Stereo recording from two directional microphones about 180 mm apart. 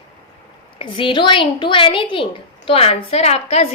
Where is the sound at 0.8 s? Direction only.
30° left (ahead or behind).